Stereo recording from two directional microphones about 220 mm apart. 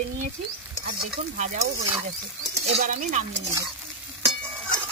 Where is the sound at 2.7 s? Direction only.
35° right (ahead or behind).